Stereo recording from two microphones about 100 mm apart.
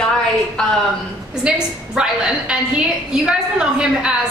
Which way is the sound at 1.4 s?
10° right (ahead or behind).